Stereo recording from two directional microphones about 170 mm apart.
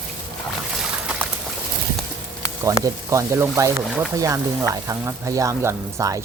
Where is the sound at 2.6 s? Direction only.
15° right (ahead or behind).